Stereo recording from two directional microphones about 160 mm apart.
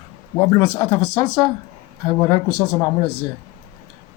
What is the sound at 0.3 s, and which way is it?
Speech, 30° left (ahead or behind).